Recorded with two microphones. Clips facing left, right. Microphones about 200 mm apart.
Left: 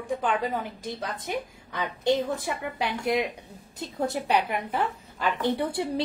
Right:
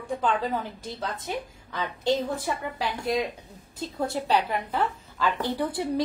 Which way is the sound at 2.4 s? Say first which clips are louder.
Even; 20° left (ahead or behind).